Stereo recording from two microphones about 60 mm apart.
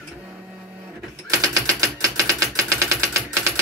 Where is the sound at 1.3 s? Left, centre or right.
Right.